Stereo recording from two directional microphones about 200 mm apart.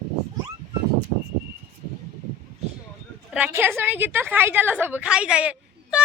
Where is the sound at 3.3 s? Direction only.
10° right (ahead or behind).